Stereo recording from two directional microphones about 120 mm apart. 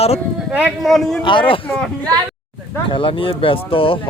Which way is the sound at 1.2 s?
45° left (ahead or behind).